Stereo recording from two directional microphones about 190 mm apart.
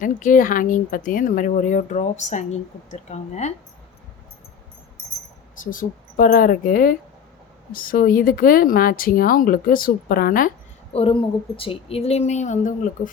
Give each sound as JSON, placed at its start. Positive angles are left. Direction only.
{"t": 0.0, "sound": "speech", "side_deg": 45}
{"t": 5.5, "sound": "speech", "side_deg": 45}
{"t": 10.9, "sound": "speech", "side_deg": 30}